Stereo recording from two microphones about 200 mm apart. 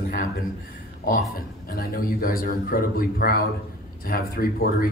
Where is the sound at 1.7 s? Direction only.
45° left (ahead or behind).